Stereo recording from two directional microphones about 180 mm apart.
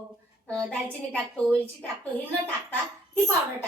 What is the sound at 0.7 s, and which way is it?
Speech, 5° left (ahead or behind).